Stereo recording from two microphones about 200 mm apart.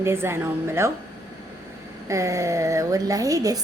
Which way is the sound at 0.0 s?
10° right (ahead or behind).